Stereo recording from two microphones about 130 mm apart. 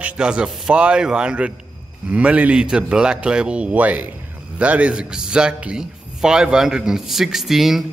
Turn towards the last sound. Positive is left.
turn(degrees=0)  # may be behind; listen again after turning